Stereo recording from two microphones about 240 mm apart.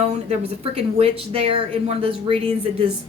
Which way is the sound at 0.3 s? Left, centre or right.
Right.